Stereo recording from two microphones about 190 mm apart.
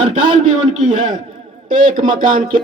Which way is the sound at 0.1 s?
30° right (ahead or behind).